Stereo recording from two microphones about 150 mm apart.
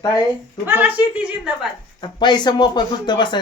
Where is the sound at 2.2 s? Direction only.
30° left (ahead or behind).